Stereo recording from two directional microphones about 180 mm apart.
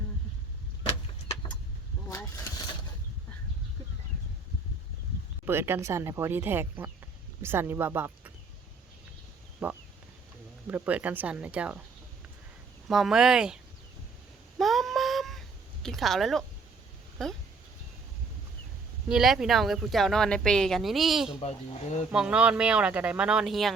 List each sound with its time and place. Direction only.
2.1 s vehicle: 15° left (ahead or behind)
5.5 s speech: 15° right (ahead or behind)
9.6 s speech: 5° right (ahead or behind)
12.9 s speech: centre (ahead or behind)
14.6 s a sound: centre (ahead or behind)
19.0 s speech: 5° right (ahead or behind)
21.4 s speech: 40° left (ahead or behind)
22.1 s speech: 5° right (ahead or behind)